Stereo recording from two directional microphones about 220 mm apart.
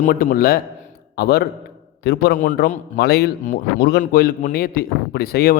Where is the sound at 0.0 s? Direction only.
40° left (ahead or behind).